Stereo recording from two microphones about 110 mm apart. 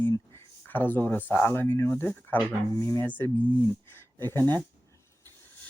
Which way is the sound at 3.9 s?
20° left (ahead or behind).